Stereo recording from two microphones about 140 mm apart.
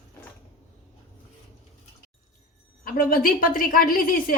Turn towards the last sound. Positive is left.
turn(degrees=90)